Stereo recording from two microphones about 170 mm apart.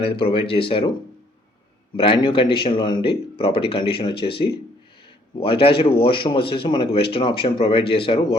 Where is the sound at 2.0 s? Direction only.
30° left (ahead or behind).